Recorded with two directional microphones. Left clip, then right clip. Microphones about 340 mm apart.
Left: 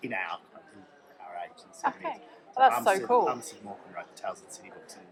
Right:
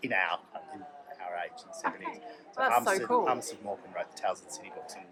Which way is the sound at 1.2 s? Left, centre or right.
Centre.